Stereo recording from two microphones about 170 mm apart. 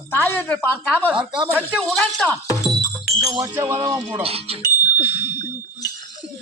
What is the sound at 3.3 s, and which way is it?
Speech, 20° right (ahead or behind).